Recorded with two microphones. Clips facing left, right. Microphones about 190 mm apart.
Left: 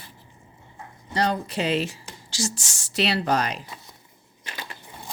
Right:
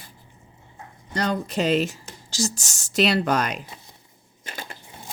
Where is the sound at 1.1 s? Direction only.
45° right (ahead or behind).